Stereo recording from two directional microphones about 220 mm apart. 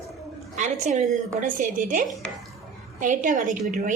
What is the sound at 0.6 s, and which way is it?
A woman's voice, 35° right (ahead or behind).